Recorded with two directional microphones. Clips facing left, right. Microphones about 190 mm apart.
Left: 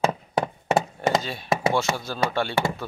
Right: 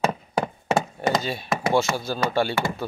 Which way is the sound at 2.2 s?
5° right (ahead or behind).